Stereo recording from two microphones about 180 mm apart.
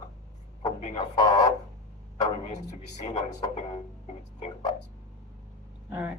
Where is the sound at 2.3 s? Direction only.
40° left (ahead or behind).